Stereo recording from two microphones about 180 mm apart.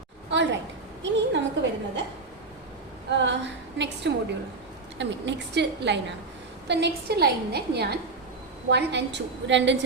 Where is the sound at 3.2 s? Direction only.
80° right.